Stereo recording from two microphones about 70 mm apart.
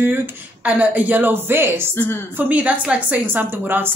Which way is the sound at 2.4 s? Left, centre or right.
Right.